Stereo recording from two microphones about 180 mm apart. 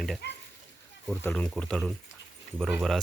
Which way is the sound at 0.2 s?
65° left (ahead or behind).